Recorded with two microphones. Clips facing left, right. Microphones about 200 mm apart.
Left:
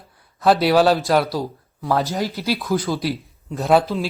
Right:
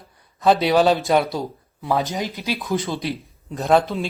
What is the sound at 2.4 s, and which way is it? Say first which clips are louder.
Speech: left 2 dB; 5° left (ahead or behind).